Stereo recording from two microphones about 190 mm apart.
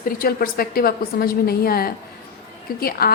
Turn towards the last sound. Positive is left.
turn(degrees=55)  # may be behind; listen again after turning